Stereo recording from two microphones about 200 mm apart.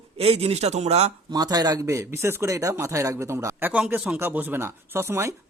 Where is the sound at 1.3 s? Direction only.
20° right (ahead or behind).